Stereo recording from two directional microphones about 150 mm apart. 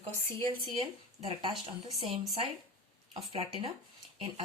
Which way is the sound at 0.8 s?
40° right (ahead or behind).